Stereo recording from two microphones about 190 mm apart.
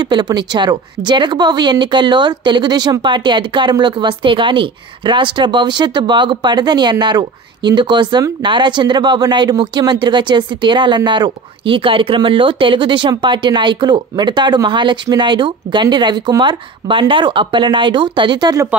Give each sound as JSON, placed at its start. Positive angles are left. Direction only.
{"t": 0.0, "sound": "speech", "side_deg": -25}